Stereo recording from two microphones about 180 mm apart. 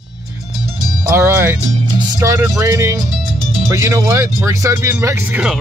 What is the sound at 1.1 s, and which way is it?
Speech, 15° right (ahead or behind).